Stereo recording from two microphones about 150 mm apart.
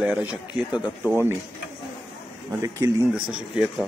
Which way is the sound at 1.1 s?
15° right (ahead or behind).